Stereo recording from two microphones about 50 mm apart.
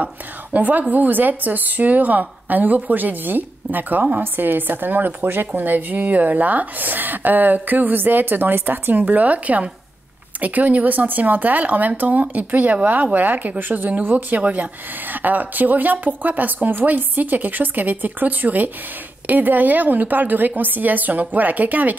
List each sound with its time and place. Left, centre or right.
0.0 s a woman's voice: right